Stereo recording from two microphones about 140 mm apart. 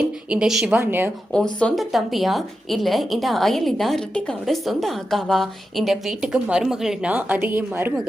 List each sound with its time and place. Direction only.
0.3 s a woman's voice: 5° right (ahead or behind)
1.5 s a woman's voice: 5° left (ahead or behind); by 7.9 s 15° right (ahead or behind)